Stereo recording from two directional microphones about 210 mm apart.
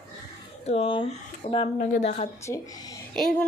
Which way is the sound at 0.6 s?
30° left (ahead or behind).